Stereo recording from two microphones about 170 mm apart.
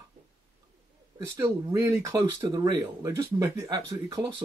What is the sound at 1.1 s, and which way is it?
Speech, 20° right (ahead or behind).